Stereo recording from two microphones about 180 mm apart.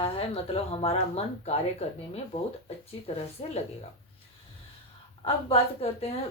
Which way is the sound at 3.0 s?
25° left (ahead or behind).